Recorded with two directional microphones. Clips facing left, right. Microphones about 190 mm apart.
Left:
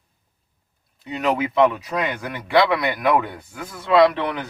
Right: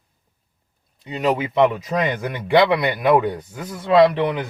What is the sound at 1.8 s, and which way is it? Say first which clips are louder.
Speech: right 3 dB; 20° right (ahead or behind).